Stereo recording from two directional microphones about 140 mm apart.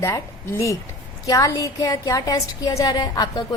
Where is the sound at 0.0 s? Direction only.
20° left (ahead or behind).